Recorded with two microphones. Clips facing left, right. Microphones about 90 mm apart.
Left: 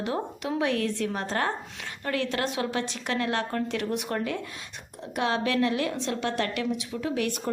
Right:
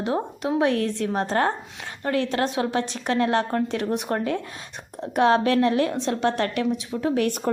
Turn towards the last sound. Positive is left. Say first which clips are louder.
# right 6 dB
turn(degrees=-40)  # may be behind; listen again after turning